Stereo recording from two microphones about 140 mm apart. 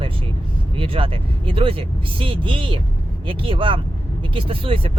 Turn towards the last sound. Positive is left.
turn(degrees=-40)  # may be behind; listen again after turning